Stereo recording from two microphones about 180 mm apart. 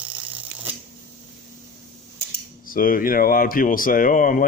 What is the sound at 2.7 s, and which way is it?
Speech, 50° left (ahead or behind).